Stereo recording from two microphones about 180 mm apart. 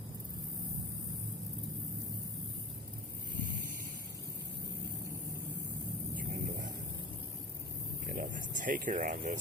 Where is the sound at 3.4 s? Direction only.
50° right (ahead or behind).